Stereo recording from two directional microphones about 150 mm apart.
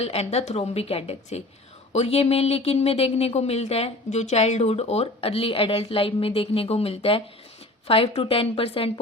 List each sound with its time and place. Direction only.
0.0 s a woman's voice: 45° left (ahead or behind)